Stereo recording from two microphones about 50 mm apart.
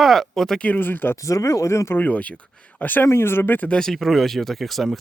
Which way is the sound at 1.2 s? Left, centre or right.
Left.